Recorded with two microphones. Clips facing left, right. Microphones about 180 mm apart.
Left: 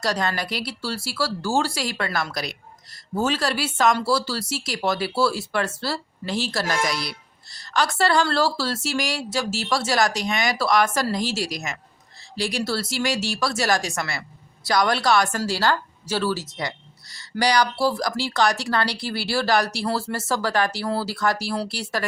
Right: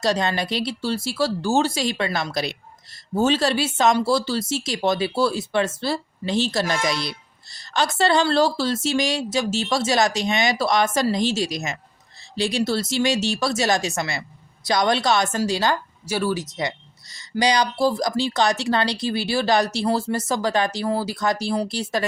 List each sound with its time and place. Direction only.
0.0 s speech: 25° right (ahead or behind)